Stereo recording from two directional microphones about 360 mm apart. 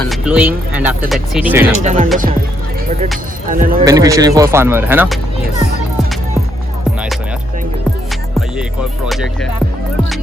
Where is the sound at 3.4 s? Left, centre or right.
Right.